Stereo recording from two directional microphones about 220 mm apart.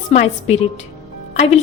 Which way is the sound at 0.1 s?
30° left (ahead or behind).